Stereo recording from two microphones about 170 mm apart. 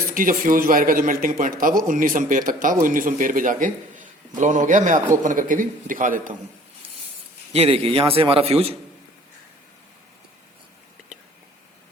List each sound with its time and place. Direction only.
0.1 s speech: 55° right (ahead or behind)
7.5 s speech: 35° right (ahead or behind)